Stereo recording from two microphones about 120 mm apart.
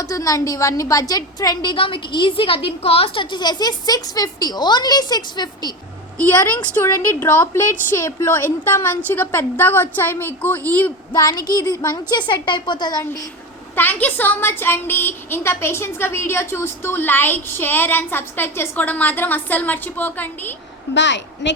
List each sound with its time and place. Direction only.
0.0 s a woman's voice: 30° left (ahead or behind)
1.7 s a woman's voice: 45° left (ahead or behind)
6.1 s speech: 15° left (ahead or behind)
11.1 s a woman's voice: 35° left (ahead or behind)
13.7 s speech: 15° left (ahead or behind)